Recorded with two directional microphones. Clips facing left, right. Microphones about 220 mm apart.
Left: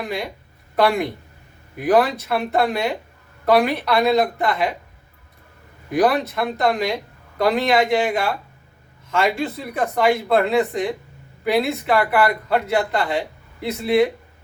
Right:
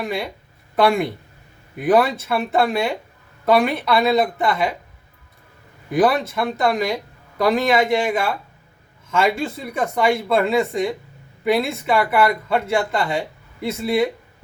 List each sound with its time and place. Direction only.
0.8 s speech: centre (ahead or behind)
5.9 s speech: centre (ahead or behind)